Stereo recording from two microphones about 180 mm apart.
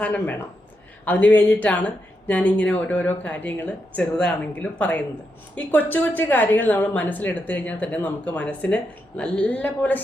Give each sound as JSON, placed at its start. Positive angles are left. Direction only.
{"t": 0.0, "sound": "a woman's voice", "side_deg": 10}